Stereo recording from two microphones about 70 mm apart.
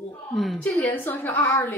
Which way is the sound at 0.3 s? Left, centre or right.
Centre.